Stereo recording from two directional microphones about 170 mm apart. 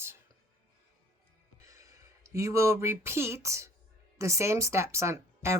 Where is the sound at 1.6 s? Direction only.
20° right (ahead or behind).